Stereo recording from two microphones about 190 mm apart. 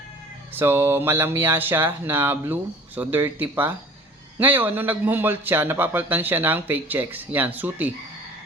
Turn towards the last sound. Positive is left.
turn(degrees=-10)  # may be behind; listen again after turning